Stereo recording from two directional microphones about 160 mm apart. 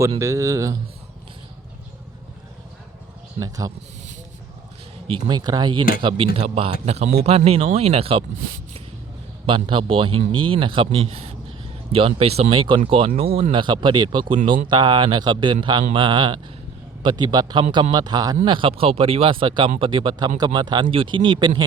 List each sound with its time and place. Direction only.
0.2 s speech: 20° right (ahead or behind)
3.4 s speech: 20° right (ahead or behind)
5.0 s a man's voice: 30° right (ahead or behind)
9.5 s a man's voice: 30° right (ahead or behind)